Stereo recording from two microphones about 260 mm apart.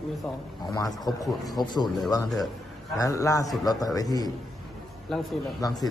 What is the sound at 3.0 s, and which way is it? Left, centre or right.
A man's voice, centre.